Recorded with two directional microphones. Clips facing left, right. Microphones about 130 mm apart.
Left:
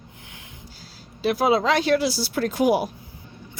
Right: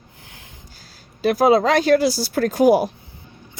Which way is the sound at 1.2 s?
45° right (ahead or behind).